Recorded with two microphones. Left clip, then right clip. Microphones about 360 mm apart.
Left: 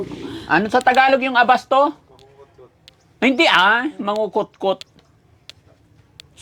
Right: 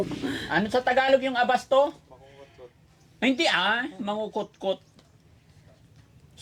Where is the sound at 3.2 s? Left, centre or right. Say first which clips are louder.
Left 10 dB; left.